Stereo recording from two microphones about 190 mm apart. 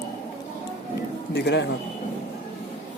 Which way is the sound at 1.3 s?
65° left (ahead or behind).